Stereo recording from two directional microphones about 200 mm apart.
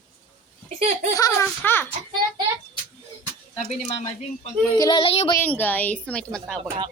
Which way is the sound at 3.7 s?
30° left (ahead or behind).